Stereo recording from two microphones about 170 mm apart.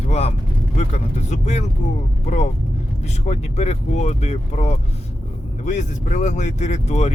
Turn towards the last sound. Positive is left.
turn(degrees=40)  # may be behind; listen again after turning